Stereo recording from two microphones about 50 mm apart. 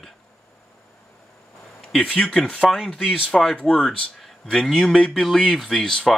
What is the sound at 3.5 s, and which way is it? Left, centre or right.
Speech, centre.